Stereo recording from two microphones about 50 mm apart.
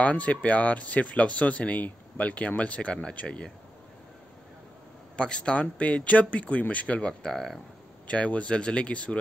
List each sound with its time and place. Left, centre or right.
0.0 s speech: left
5.1 s speech: centre
7.1 s speech: centre
8.1 s speech: left